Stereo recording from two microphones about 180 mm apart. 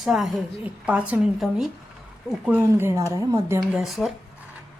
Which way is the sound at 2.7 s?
15° right (ahead or behind).